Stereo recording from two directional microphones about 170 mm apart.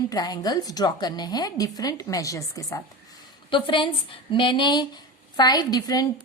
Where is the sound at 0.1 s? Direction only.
25° left (ahead or behind).